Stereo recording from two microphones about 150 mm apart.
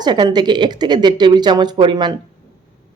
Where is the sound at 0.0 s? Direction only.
30° right (ahead or behind).